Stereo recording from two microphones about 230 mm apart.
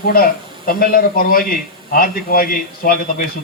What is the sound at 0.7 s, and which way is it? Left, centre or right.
A woman's voice, left.